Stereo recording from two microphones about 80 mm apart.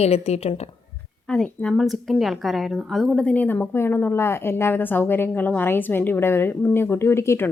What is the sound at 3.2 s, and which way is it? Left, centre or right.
Speech, centre.